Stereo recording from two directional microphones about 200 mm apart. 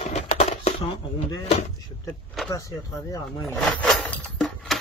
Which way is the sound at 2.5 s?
15° left (ahead or behind).